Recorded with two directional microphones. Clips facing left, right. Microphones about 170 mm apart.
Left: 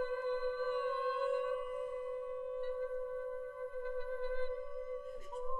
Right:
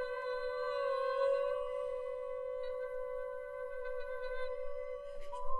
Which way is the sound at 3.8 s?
45° left (ahead or behind).